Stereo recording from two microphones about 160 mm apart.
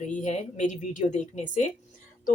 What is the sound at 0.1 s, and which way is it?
Speech, 50° left (ahead or behind).